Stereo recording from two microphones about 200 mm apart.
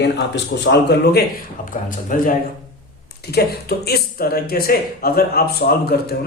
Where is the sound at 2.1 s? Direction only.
40° left (ahead or behind).